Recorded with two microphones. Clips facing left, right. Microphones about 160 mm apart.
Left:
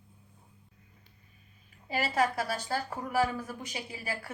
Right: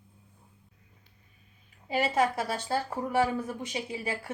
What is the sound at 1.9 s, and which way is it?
Speech, 20° right (ahead or behind).